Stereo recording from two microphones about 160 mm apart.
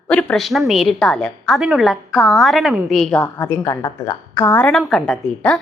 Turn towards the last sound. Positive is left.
turn(degrees=5)  # may be behind; listen again after turning